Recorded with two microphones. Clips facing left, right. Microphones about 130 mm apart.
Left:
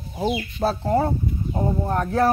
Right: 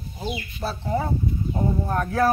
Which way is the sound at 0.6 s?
45° left (ahead or behind).